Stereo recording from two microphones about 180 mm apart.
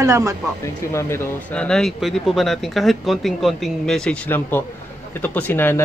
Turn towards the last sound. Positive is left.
turn(degrees=10)  # may be behind; listen again after turning